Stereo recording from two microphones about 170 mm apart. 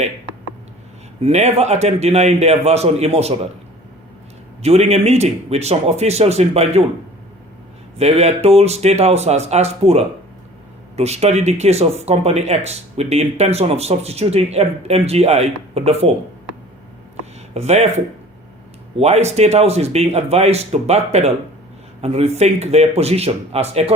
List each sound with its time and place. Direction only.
1.2 s speech: 40° right (ahead or behind)
4.6 s speech: 40° right (ahead or behind)
7.9 s speech: 35° right (ahead or behind)
17.5 s speech: 40° right (ahead or behind)
18.9 s speech: 40° right (ahead or behind)